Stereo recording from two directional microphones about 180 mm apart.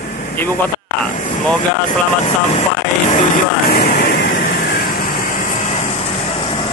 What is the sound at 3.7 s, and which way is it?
Vehicle, 60° left (ahead or behind).